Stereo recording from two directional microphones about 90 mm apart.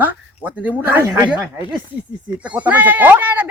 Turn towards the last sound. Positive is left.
turn(degrees=-20)  # may be behind; listen again after turning